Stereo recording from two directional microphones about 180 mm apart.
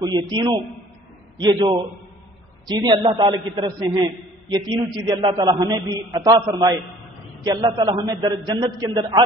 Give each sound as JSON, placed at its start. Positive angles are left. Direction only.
{"t": 0.0, "sound": "a man's voice", "side_deg": -25}